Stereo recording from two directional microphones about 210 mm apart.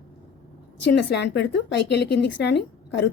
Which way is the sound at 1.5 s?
55° left (ahead or behind).